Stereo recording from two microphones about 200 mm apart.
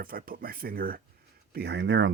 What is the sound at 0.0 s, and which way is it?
Speech, 45° right (ahead or behind).